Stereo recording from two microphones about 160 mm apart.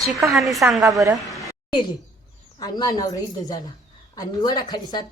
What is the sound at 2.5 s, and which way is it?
Speech, 25° left (ahead or behind).